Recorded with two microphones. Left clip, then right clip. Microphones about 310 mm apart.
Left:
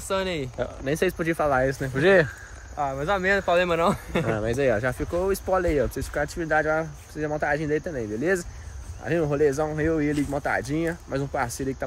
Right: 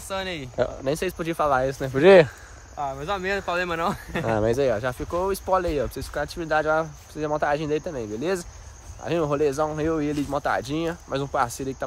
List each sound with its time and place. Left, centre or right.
0.1 s speech: centre
2.0 s speech: right
2.8 s speech: centre
4.3 s speech: right
4.6 s speech: centre